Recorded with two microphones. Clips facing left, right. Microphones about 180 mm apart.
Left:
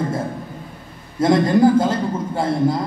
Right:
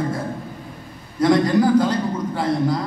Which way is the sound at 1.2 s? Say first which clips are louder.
Left 2 dB; 25° left (ahead or behind).